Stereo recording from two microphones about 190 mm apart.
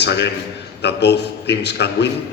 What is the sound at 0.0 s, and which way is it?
A man's voice, 65° left (ahead or behind).